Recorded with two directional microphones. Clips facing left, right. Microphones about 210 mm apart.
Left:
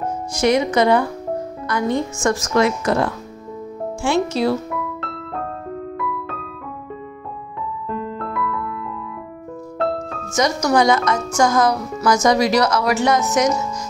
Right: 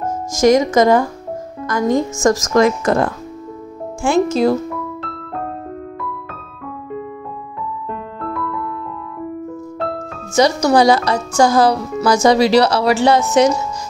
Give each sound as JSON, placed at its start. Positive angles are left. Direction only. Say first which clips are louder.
{"t": 0.4, "sound": "a woman's voice", "louder": "right 5 dB", "side_deg": -45}
{"t": 7.9, "sound": "music", "louder": "left 3 dB", "side_deg": 0}
{"t": 10.3, "sound": "speech", "louder": "right 4 dB", "side_deg": -30}